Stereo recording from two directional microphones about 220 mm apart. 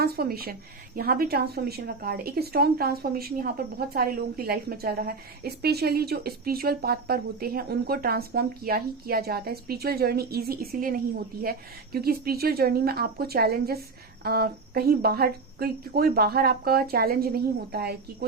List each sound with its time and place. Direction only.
0.0 s speech: 45° right (ahead or behind)